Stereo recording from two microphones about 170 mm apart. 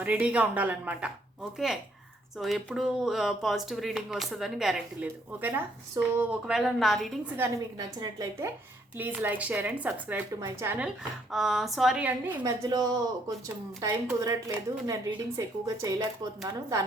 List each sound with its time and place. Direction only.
0.0 s speech: 5° right (ahead or behind)
7.3 s speech: 15° right (ahead or behind)
12.4 s a woman's voice: 20° right (ahead or behind)
13.8 s a woman's voice: 20° right (ahead or behind)